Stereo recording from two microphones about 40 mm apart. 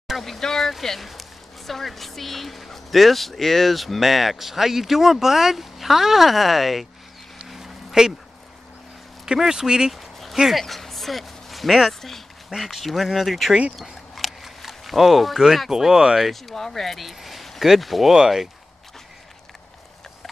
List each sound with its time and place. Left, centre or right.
0.2 s speech: centre
7.4 s a sound: centre
9.2 s speech: centre
9.9 s a sound: centre
10.3 s speech: centre
10.6 s speech: centre
13.7 s a sound: centre
15.7 s speech: centre
16.5 s speech: centre
18.1 s speech: centre